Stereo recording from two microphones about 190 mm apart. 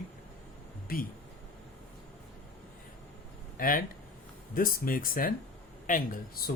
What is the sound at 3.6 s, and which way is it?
Speech, 45° left (ahead or behind).